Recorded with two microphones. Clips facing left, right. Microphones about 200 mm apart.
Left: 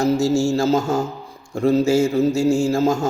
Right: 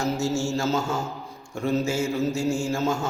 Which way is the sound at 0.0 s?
35° left (ahead or behind).